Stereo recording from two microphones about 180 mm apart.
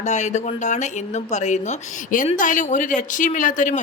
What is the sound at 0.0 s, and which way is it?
A woman's voice, 40° left (ahead or behind).